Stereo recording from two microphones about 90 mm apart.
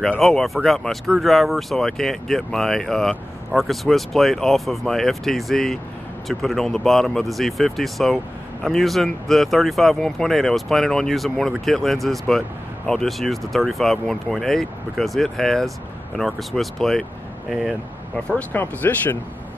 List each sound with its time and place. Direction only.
0.2 s speech: centre (ahead or behind)
18.3 s speech: 20° left (ahead or behind)